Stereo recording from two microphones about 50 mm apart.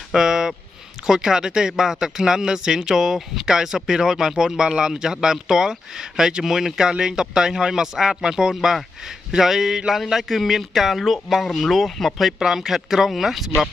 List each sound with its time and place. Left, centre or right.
0.1 s a man's voice: centre